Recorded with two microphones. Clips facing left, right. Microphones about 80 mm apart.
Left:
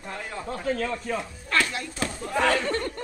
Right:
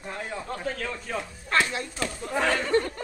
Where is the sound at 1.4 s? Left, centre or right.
Right.